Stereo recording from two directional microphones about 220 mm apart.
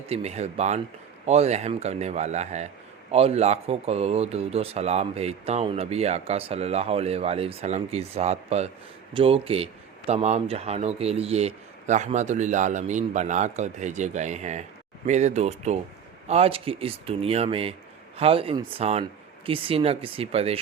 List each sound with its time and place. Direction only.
0.1 s a man's voice: 30° right (ahead or behind)